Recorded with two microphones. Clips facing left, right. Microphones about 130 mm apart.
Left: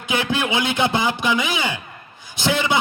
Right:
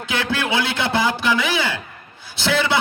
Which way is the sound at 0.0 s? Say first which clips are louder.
Left 1 dB; 15° left (ahead or behind).